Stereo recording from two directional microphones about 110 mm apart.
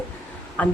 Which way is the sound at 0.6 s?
10° left (ahead or behind).